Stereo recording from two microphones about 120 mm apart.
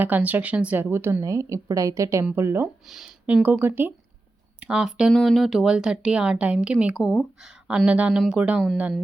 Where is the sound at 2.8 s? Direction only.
5° right (ahead or behind).